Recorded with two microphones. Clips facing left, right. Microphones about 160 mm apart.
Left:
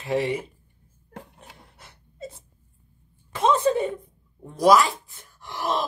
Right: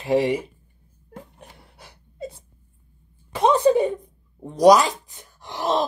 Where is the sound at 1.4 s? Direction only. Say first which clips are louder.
Right 2 dB; 10° right (ahead or behind).